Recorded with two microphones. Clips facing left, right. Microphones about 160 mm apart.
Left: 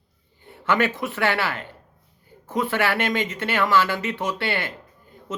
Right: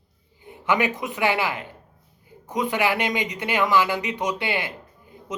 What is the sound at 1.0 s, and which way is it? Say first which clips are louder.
Speech: even; 15° right (ahead or behind).